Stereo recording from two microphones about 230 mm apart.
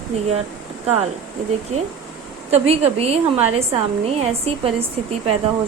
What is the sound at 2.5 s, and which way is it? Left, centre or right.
A woman's voice, right.